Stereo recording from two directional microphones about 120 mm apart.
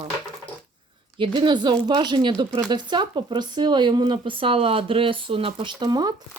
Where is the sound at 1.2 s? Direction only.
45° right (ahead or behind).